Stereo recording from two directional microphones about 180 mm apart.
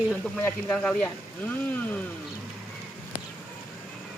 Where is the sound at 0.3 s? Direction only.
5° left (ahead or behind).